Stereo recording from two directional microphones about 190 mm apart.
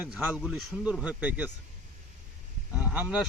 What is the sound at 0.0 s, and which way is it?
A man's voice, 10° right (ahead or behind).